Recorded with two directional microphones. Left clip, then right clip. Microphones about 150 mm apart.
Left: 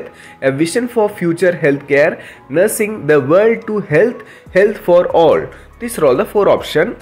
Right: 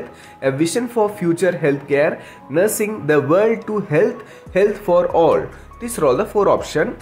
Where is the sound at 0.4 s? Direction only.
10° left (ahead or behind).